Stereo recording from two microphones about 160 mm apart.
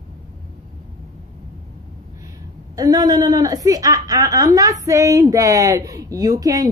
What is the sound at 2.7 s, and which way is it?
Speech, 25° right (ahead or behind).